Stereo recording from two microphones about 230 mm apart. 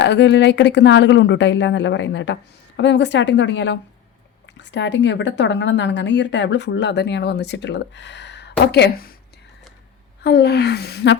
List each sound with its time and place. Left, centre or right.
0.0 s speech: left
10.2 s speech: left